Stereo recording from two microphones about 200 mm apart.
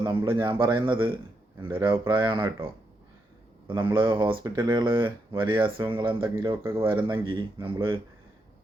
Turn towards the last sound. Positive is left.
turn(degrees=-25)  # may be behind; listen again after turning